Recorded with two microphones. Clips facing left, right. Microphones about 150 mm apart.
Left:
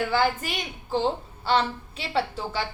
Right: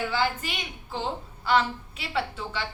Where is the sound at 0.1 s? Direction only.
45° left (ahead or behind).